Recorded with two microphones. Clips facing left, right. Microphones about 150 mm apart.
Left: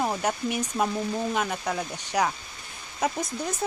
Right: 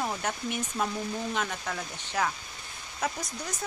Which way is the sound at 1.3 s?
15° left (ahead or behind).